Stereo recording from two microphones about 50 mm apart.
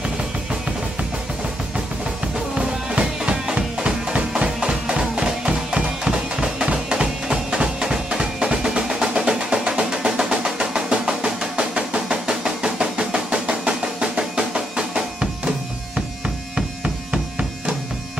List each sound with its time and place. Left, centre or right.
2.6 s music: centre
16.5 s music: centre